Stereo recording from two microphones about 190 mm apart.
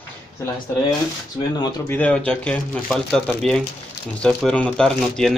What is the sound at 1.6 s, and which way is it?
Speech, 20° left (ahead or behind).